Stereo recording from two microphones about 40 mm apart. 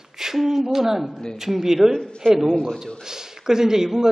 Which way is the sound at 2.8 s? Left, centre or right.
Centre.